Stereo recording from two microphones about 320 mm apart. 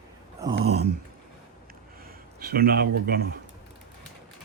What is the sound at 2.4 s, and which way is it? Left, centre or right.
Speech, right.